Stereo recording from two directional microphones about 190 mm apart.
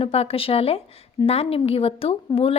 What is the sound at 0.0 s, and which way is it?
A woman's voice, 30° left (ahead or behind).